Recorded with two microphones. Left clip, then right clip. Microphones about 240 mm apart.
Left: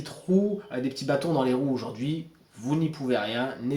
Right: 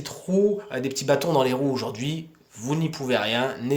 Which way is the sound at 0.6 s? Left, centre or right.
Right.